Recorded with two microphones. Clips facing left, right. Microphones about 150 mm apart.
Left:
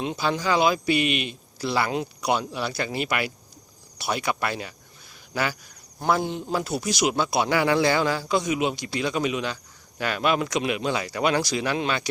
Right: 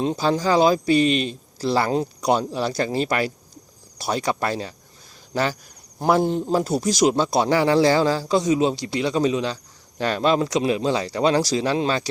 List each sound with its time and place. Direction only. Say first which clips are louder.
0.0 s speech: right 5 dB; 35° right (ahead or behind)